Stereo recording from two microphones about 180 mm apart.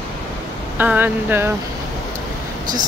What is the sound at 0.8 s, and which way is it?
Speech, 10° right (ahead or behind).